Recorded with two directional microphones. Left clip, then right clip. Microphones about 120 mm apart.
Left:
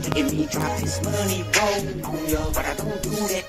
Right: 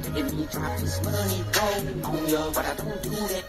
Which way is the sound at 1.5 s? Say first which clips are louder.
Left 4 dB; 25° left (ahead or behind).